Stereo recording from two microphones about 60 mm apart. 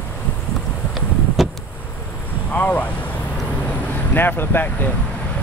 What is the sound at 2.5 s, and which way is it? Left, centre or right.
Speech, left.